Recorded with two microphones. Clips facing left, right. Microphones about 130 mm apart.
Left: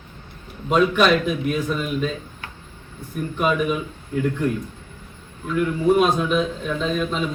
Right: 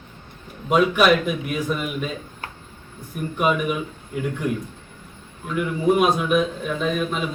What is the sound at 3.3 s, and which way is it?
A man's voice, 10° right (ahead or behind).